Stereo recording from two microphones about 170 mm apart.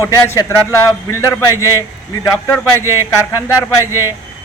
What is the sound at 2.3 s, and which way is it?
Speech, 15° left (ahead or behind).